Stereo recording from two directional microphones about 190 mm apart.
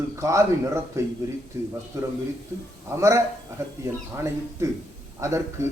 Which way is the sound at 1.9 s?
15° right (ahead or behind).